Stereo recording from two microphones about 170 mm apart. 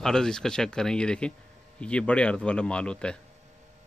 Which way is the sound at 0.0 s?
5° left (ahead or behind).